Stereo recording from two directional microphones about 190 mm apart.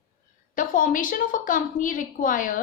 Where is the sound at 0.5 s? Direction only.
45° left (ahead or behind).